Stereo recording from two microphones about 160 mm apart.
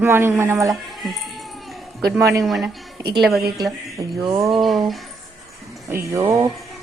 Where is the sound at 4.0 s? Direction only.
25° right (ahead or behind).